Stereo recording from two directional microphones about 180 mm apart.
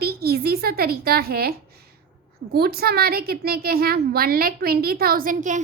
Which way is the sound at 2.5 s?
60° right (ahead or behind).